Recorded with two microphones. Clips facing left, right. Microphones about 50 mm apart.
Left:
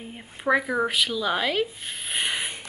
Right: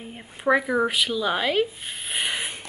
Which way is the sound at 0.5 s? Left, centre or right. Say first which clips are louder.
Right 2 dB; centre.